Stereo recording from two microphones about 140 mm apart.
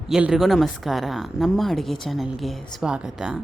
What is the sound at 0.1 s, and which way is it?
Speech, 5° right (ahead or behind).